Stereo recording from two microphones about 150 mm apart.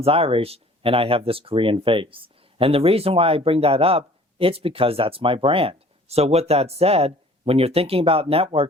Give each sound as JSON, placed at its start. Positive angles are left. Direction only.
{"t": 0.0, "sound": "speech", "side_deg": -40}